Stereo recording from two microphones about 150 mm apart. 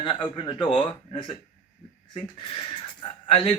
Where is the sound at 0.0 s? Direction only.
30° left (ahead or behind).